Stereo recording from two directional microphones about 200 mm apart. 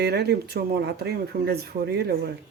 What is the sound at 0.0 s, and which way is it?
Speech, 55° right (ahead or behind).